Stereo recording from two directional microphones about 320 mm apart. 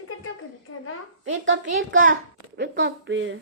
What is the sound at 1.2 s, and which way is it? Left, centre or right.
A child's voice, right.